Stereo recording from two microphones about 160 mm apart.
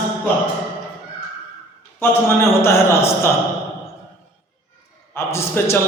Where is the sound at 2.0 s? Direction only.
15° left (ahead or behind).